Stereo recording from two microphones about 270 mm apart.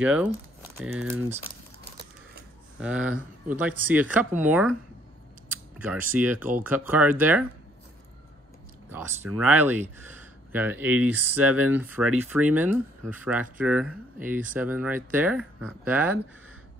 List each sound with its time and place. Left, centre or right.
0.0 s speech: centre
2.8 s speech: centre
5.8 s speech: centre
8.9 s speech: centre
11.3 s speech: right
11.7 s speech: centre